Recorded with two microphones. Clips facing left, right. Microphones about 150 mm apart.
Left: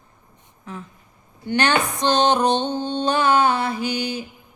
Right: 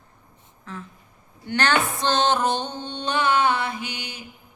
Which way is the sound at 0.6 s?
15° left (ahead or behind).